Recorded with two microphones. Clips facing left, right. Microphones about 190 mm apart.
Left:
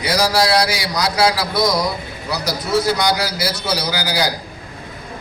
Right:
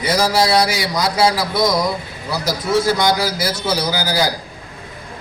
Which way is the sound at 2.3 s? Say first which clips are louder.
Right 1 dB; 50° right (ahead or behind).